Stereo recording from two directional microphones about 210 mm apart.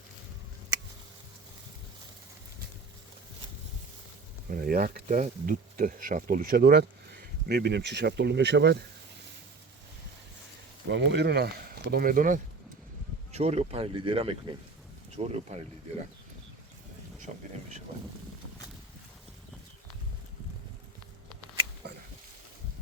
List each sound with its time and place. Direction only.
4.4 s speech: 45° right (ahead or behind)
10.8 s speech: 55° right (ahead or behind); by 15.6 s 30° right (ahead or behind)